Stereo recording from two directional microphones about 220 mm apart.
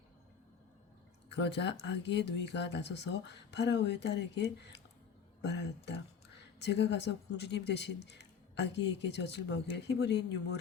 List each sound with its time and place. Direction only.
1.3 s a woman's voice: 50° left (ahead or behind)